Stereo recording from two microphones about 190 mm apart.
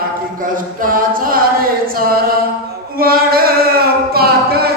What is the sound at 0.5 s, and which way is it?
A capella, 45° right (ahead or behind).